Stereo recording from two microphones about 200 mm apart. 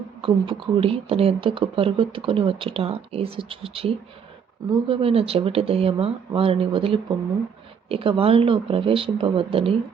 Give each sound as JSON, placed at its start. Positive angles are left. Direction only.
{"t": 0.2, "sound": "speech", "side_deg": -25}